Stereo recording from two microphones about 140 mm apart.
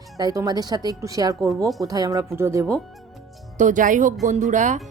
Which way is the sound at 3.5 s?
65° right (ahead or behind).